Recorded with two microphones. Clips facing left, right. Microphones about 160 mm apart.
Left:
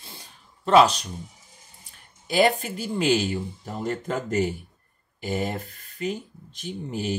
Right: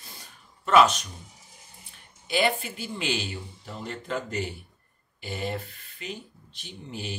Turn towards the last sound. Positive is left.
turn(degrees=45)  # may be behind; listen again after turning